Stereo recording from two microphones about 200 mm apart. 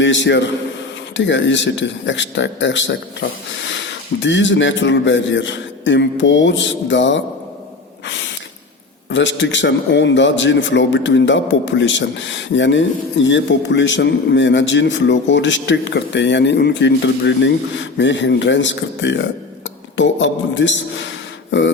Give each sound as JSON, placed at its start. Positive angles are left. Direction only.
{"t": 0.0, "sound": "a man's voice", "side_deg": 65}
{"t": 8.0, "sound": "snort", "side_deg": 65}
{"t": 9.0, "sound": "a man's voice", "side_deg": 65}